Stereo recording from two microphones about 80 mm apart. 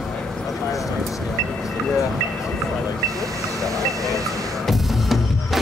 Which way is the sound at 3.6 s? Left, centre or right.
Right.